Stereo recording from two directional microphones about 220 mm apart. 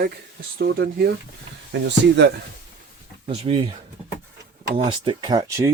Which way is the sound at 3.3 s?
25° right (ahead or behind).